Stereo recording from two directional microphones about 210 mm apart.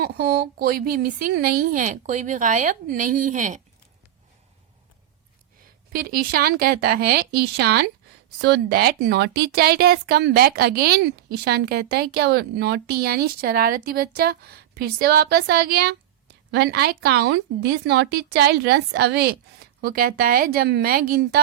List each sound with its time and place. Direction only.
0.0 s speech: 45° right (ahead or behind)
5.9 s a woman's voice: 45° right (ahead or behind)